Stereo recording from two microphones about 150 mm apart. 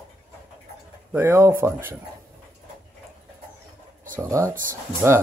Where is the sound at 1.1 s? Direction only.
15° right (ahead or behind).